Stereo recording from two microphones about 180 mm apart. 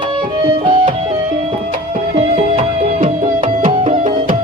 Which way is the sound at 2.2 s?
35° right (ahead or behind).